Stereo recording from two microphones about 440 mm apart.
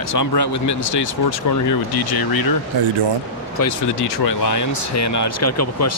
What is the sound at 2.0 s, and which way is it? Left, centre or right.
Speech, left.